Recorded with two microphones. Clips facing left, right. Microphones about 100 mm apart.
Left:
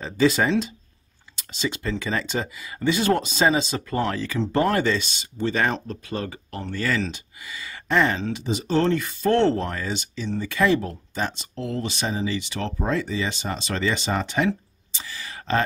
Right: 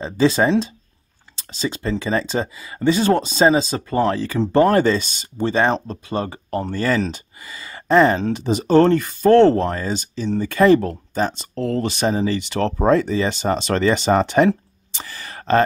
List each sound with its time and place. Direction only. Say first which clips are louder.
0.0 s speech: right 4 dB; 30° right (ahead or behind)
5.5 s speech: right 6 dB; 30° right (ahead or behind); by 15.6 s 50° right (ahead or behind)